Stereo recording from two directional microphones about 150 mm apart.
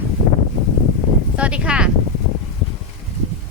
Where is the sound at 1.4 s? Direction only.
10° right (ahead or behind).